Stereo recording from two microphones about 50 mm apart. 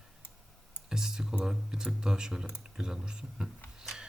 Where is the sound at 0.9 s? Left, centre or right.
Centre.